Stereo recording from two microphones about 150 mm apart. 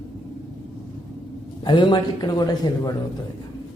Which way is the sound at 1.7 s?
30° left (ahead or behind).